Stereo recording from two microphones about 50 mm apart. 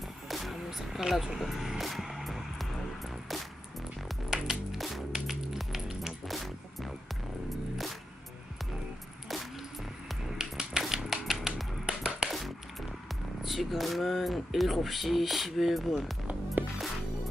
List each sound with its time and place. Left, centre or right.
0.3 s music: centre
1.8 s vehicle: centre
4.3 s music: centre
10.2 s music: centre
13.4 s speech: centre
16.6 s music: right